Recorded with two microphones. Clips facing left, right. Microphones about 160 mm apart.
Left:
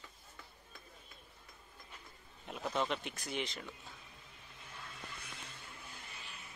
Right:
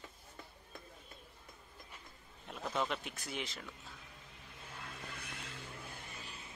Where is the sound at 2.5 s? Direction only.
Centre (ahead or behind).